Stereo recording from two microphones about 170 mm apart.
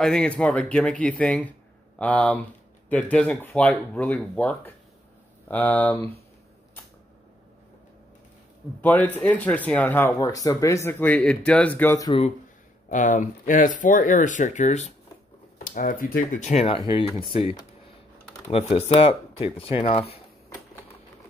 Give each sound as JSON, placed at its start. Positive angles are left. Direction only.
{"t": 0.0, "sound": "speech", "side_deg": 5}
{"t": 5.9, "sound": "speech", "side_deg": -35}
{"t": 8.8, "sound": "speech", "side_deg": 10}
{"t": 12.9, "sound": "speech", "side_deg": 50}